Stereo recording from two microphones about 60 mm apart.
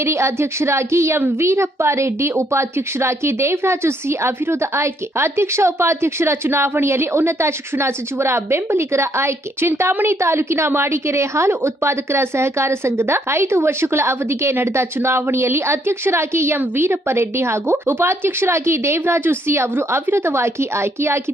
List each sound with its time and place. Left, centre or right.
0.0 s a woman's voice: right